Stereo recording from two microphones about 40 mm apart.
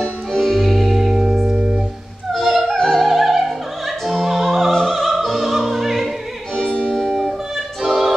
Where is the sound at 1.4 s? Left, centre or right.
Right.